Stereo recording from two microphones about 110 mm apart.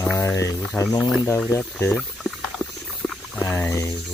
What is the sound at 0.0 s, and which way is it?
Speech, 20° left (ahead or behind).